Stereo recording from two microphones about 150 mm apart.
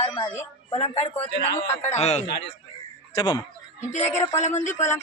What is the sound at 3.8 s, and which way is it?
Speech, 50° left (ahead or behind).